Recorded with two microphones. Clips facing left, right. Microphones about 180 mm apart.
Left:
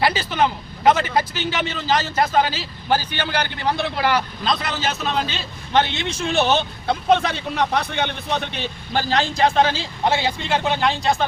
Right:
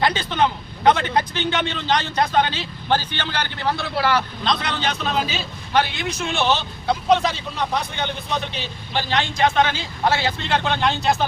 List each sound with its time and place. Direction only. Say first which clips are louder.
0.0 s a man's voice: even; 5° left (ahead or behind)
4.4 s a man's voice: even; centre (ahead or behind)
5.7 s a man's voice: left 1 dB; 25° left (ahead or behind)
6.5 s a man's voice: left 1 dB; 55° left (ahead or behind)
8.5 s speech: left 2 dB; 50° left (ahead or behind); by 9.8 s 35° left (ahead or behind)
10.0 s speech: even; 15° left (ahead or behind); by 11.3 s centre (ahead or behind)